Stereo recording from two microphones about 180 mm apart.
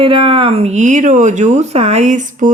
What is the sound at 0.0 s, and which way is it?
Speech, 30° right (ahead or behind).